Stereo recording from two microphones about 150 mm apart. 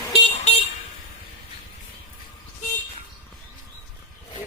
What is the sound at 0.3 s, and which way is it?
Vehicle, 45° left (ahead or behind).